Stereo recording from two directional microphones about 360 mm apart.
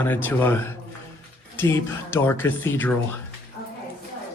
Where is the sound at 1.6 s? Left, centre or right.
Centre.